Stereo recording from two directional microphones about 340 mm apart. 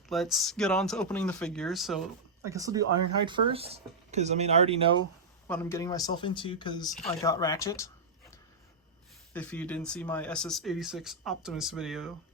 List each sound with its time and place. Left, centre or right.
0.1 s speech: centre
5.5 s speech: centre